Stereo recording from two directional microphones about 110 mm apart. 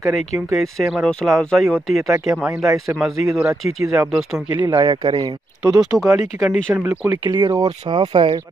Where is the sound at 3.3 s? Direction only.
Centre (ahead or behind).